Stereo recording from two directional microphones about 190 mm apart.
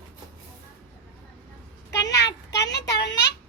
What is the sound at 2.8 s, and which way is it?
Child singing, 20° left (ahead or behind).